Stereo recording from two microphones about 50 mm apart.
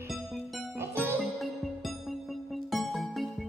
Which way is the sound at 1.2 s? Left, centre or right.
Centre.